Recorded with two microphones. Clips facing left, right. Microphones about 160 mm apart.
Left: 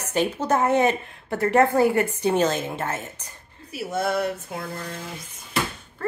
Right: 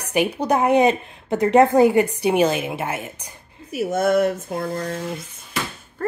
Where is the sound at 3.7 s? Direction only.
50° right (ahead or behind).